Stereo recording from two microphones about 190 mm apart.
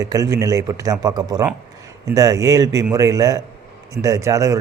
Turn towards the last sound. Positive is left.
turn(degrees=-15)  # may be behind; listen again after turning